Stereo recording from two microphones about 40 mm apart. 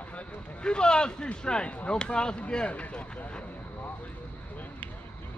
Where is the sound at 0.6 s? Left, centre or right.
Left.